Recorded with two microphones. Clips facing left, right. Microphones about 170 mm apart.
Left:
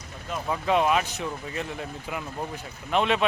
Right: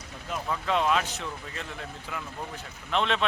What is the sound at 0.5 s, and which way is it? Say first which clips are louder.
Speech: left 3 dB; 15° left (ahead or behind).